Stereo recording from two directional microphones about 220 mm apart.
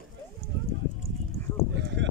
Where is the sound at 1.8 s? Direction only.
55° right (ahead or behind).